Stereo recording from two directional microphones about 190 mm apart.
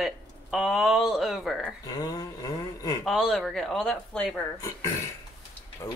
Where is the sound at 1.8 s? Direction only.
20° left (ahead or behind).